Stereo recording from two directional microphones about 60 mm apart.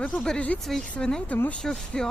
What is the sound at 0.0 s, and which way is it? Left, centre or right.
Speech, centre.